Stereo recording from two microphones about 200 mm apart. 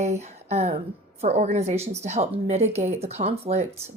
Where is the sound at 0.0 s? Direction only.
35° right (ahead or behind).